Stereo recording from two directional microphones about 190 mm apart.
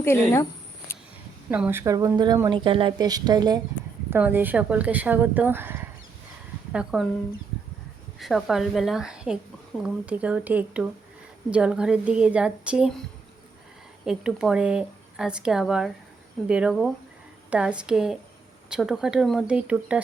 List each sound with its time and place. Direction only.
0.0 s speech: 15° left (ahead or behind)
1.5 s speech: 10° right (ahead or behind)
4.1 s a woman's voice: 10° right (ahead or behind)
8.2 s a woman's voice: centre (ahead or behind)
14.0 s speech: 5° right (ahead or behind)